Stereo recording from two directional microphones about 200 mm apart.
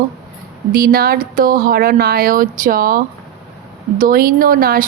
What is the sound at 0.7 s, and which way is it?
A woman's voice, 50° right (ahead or behind).